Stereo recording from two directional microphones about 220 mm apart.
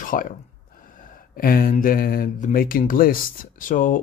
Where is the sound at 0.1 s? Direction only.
40° left (ahead or behind).